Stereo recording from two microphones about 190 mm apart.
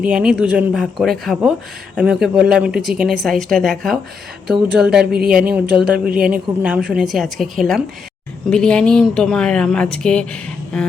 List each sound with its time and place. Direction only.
0.0 s speech: 5° right (ahead or behind)
5.1 s a woman's voice: 50° right (ahead or behind)
5.5 s speech: 5° right (ahead or behind)